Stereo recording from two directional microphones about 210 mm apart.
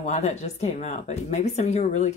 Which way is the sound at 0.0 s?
35° left (ahead or behind).